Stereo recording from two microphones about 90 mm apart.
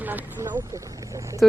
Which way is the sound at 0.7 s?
40° right (ahead or behind).